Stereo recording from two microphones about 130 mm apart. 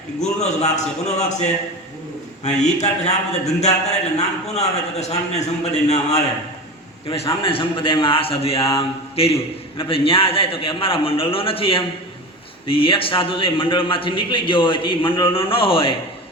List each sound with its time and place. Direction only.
0.2 s a man's voice: 60° left (ahead or behind)
2.6 s a man's voice: 60° left (ahead or behind)
7.1 s a man's voice: 45° left (ahead or behind)